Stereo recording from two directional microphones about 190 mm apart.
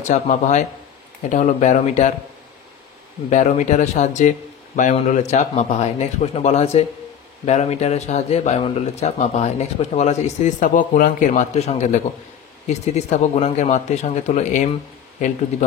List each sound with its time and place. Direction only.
0.1 s a man's voice: 40° left (ahead or behind)
3.3 s a man's voice: 40° left (ahead or behind)